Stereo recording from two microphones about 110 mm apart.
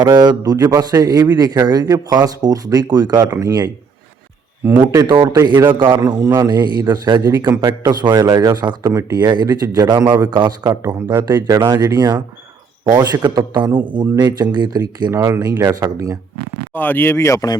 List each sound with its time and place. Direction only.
0.0 s a man's voice: 40° right (ahead or behind)
3.2 s speech: 25° right (ahead or behind)
4.9 s speech: 30° right (ahead or behind)
5.3 s a man's voice: 40° right (ahead or behind)
13.2 s a man's voice: 40° right (ahead or behind)
16.7 s speech: 15° left (ahead or behind)